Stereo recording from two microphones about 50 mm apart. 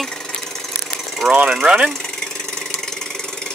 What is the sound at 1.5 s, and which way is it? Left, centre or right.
Speech, centre.